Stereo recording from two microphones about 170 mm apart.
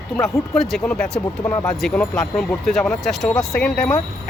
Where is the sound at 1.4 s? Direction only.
15° left (ahead or behind).